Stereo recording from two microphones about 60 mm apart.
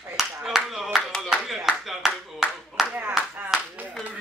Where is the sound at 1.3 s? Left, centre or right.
Centre.